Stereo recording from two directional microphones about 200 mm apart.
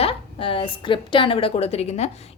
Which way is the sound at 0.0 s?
30° left (ahead or behind).